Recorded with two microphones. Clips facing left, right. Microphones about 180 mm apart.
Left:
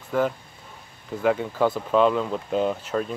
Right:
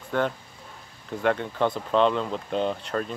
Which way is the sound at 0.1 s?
Centre (ahead or behind).